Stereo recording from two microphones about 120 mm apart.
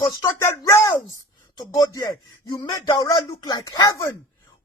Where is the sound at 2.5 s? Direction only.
35° left (ahead or behind).